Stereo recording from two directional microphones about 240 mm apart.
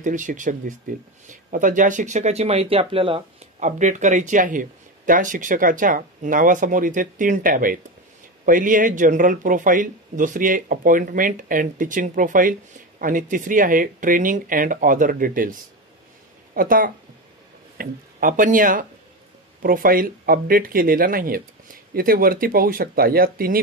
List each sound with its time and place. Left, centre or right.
0.0 s speech: right
16.5 s speech: right